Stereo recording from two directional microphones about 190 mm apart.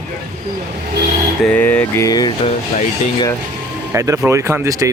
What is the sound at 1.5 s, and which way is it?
Speech, 10° left (ahead or behind).